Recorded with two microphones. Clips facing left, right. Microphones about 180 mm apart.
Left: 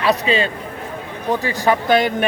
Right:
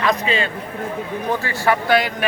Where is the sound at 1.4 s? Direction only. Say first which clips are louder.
Left 3 dB; 15° left (ahead or behind).